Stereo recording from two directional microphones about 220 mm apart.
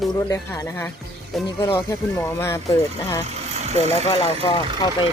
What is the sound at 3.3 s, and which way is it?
Vehicle, 30° right (ahead or behind).